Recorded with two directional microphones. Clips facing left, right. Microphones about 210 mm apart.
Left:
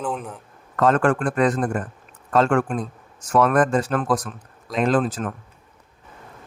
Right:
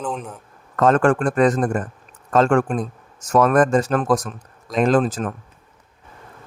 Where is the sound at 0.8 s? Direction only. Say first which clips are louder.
Right 2 dB; 45° right (ahead or behind).